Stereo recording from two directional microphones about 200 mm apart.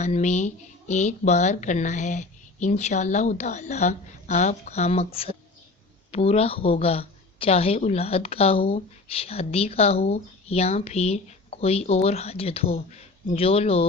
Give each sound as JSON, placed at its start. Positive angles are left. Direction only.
{"t": 0.0, "sound": "a woman's voice", "side_deg": 35}